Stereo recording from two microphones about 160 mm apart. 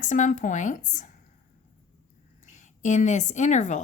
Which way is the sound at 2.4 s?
50° left (ahead or behind).